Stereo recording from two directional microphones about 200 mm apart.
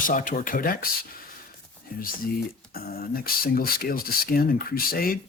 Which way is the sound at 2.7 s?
50° left (ahead or behind).